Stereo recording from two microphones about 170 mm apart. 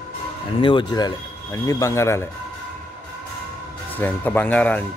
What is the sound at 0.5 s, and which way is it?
Speech, 30° left (ahead or behind).